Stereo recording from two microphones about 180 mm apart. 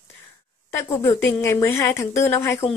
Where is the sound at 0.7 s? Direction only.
15° left (ahead or behind).